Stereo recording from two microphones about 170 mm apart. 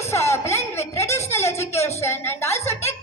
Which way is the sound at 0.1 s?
15° left (ahead or behind).